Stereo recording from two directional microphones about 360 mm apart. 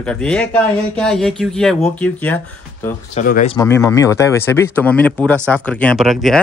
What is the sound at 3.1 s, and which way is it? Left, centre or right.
Speech, left.